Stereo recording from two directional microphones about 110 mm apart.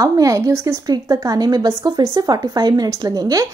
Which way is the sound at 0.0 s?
30° right (ahead or behind).